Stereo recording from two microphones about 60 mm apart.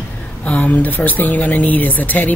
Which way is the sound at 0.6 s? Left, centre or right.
Left.